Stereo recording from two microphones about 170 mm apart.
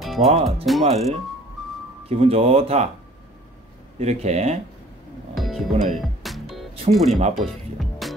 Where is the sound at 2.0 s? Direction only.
35° right (ahead or behind).